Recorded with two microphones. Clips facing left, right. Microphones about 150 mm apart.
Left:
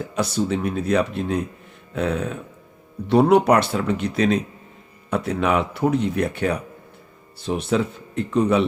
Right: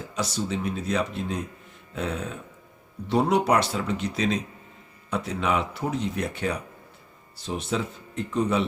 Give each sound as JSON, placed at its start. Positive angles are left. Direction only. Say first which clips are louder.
{"t": 0.2, "sound": "speech", "louder": "left 6 dB", "side_deg": 55}
{"t": 1.9, "sound": "a sound", "louder": "left 7 dB", "side_deg": 60}
{"t": 3.1, "sound": "speech", "louder": "left 6 dB", "side_deg": 60}